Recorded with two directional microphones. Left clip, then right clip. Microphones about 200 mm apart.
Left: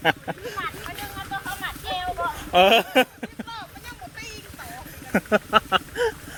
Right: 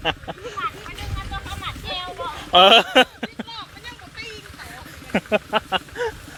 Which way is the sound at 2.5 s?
15° right (ahead or behind).